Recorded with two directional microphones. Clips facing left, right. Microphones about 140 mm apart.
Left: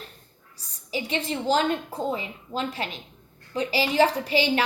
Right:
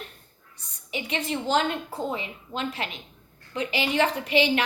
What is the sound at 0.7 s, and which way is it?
A woman's voice, 35° left (ahead or behind).